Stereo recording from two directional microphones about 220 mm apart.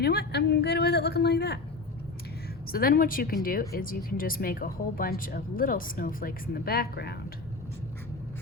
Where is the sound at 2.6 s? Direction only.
40° left (ahead or behind).